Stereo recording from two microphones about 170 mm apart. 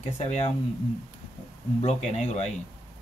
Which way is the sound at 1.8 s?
40° left (ahead or behind).